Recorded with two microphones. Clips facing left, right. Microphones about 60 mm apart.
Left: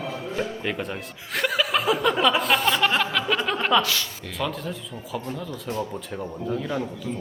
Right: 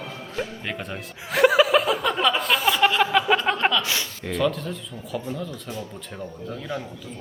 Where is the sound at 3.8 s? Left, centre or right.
Right.